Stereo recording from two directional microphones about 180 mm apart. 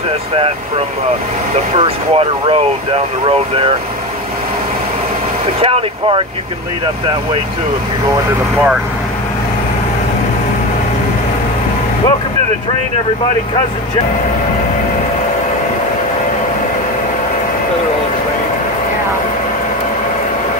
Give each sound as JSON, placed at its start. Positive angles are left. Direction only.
{"t": 1.8, "sound": "speech", "side_deg": -30}
{"t": 5.6, "sound": "speech", "side_deg": -30}